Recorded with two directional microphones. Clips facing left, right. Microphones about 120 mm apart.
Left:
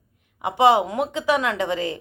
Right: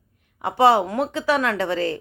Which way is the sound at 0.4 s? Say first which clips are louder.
Even; 15° left (ahead or behind).